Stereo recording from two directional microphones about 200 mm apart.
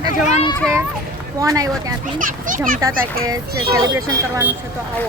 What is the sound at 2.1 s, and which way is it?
A child's voice, 45° right (ahead or behind).